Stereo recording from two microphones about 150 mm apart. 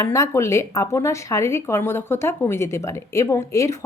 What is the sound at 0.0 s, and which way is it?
A woman's voice, 20° left (ahead or behind).